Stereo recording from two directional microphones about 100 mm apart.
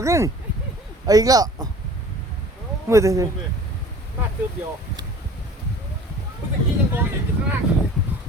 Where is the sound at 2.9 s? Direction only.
30° right (ahead or behind).